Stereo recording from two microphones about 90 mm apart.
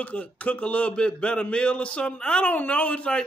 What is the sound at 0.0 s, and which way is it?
A man's voice, 15° left (ahead or behind).